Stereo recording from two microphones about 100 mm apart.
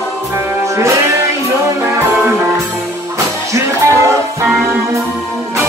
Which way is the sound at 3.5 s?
30° right (ahead or behind).